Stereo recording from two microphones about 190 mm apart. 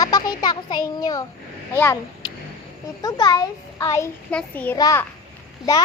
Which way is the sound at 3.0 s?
20° left (ahead or behind).